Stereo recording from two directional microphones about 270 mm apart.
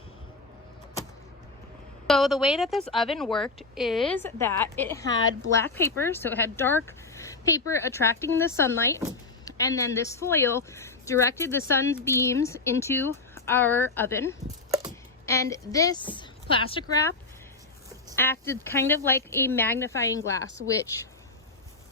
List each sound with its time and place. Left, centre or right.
2.0 s a woman's voice: centre
14.4 s a sound: centre
15.3 s a woman's voice: centre
18.2 s a woman's voice: centre